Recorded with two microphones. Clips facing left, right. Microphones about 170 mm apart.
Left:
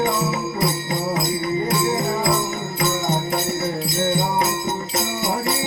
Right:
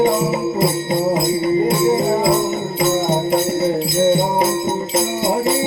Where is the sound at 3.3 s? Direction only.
25° right (ahead or behind).